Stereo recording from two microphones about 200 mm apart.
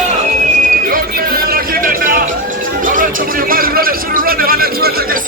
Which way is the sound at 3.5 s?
45° right (ahead or behind).